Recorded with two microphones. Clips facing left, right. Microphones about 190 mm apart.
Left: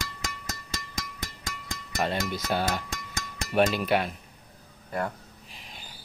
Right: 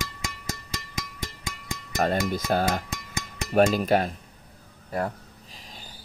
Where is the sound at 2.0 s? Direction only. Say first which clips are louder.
Right 4 dB; 50° right (ahead or behind).